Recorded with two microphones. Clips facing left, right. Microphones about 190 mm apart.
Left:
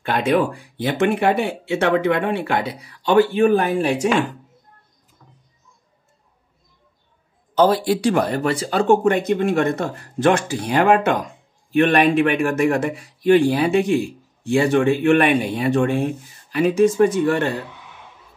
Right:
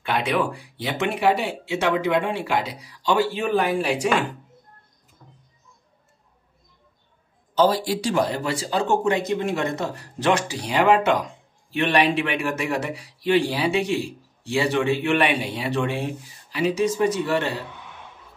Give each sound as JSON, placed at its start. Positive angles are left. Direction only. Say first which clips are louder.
{"t": 0.0, "sound": "speech", "louder": "left 5 dB", "side_deg": 50}
{"t": 7.5, "sound": "speech", "louder": "left 4 dB", "side_deg": 55}